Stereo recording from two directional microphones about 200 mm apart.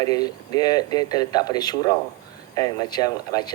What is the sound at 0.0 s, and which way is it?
Speech, 20° left (ahead or behind).